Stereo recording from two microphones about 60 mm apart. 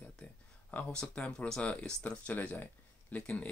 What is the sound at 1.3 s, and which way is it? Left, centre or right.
Speech, centre.